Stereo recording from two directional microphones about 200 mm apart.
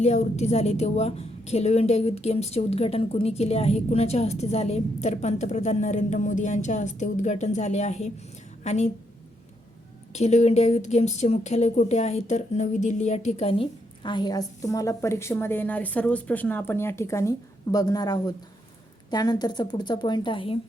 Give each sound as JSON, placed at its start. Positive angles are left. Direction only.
{"t": 0.0, "sound": "a woman's voice", "side_deg": 35}
{"t": 10.1, "sound": "speech", "side_deg": 35}